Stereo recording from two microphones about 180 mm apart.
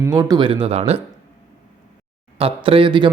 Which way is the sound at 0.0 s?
20° right (ahead or behind).